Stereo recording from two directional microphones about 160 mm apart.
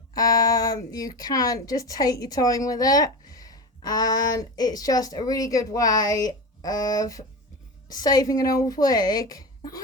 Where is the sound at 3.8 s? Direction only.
25° left (ahead or behind).